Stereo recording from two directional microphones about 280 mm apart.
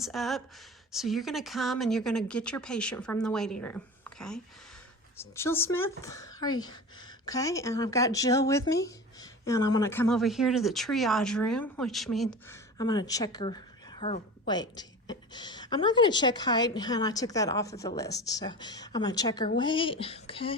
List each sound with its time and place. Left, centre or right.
0.0 s speech: centre
12.7 s a woman's voice: centre